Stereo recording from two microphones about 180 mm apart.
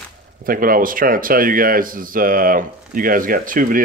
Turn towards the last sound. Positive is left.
turn(degrees=-50)  # may be behind; listen again after turning